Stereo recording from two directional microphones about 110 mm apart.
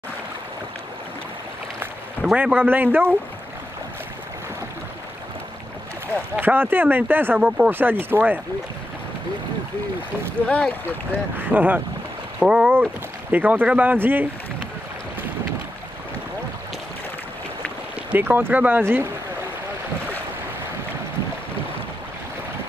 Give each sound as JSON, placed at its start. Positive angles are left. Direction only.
{"t": 2.3, "sound": "speech", "side_deg": -15}
{"t": 6.3, "sound": "speech", "side_deg": -20}
{"t": 10.4, "sound": "speech", "side_deg": 10}
{"t": 11.3, "sound": "speech", "side_deg": -15}
{"t": 18.1, "sound": "speech", "side_deg": -15}